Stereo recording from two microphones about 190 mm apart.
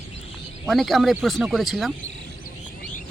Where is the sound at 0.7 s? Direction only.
Centre (ahead or behind).